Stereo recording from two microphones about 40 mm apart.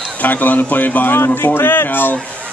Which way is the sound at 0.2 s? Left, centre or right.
Left.